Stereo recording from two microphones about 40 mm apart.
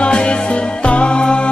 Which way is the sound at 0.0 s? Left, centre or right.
Left.